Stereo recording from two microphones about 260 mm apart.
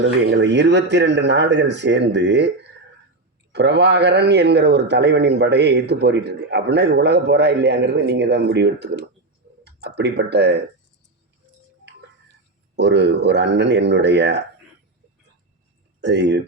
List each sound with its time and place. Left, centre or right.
0.0 s a man's voice: right
3.5 s a man's voice: right
12.7 s a man's voice: right
16.0 s speech: right